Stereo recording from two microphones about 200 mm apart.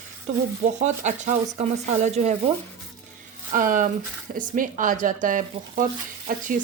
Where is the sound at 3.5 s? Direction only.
40° right (ahead or behind).